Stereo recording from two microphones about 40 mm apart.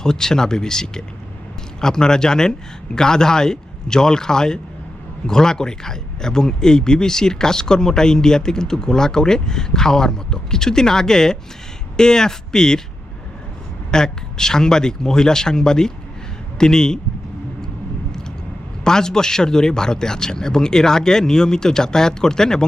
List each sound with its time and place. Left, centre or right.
0.0 s speech: centre
13.9 s speech: centre
18.9 s speech: centre